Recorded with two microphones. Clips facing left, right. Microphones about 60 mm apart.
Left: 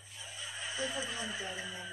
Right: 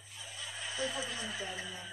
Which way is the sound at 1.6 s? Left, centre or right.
Left.